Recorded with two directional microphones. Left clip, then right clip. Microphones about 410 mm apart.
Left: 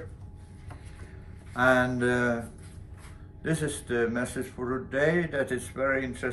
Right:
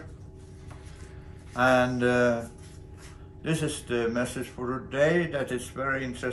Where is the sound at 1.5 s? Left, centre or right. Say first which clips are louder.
Right 1 dB; centre.